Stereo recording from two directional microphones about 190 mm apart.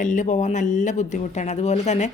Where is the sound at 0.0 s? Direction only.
40° left (ahead or behind).